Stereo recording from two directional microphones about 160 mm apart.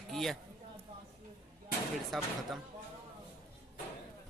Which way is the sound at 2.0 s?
Centre (ahead or behind).